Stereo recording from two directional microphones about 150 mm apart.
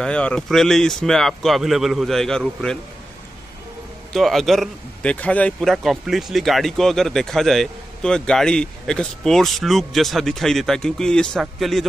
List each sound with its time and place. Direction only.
0.0 s speech: 5° left (ahead or behind)
4.1 s speech: centre (ahead or behind)